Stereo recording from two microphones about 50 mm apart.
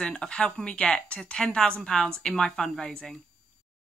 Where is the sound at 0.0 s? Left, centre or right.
Centre.